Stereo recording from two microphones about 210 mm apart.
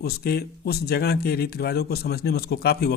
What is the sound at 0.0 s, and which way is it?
Speech, 50° left (ahead or behind).